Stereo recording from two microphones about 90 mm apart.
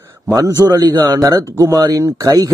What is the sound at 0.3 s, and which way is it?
Speech, 35° right (ahead or behind).